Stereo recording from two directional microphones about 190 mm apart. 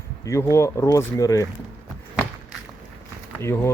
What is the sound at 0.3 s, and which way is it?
Speech, 15° left (ahead or behind).